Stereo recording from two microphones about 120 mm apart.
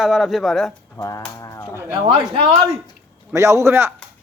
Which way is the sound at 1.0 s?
30° left (ahead or behind).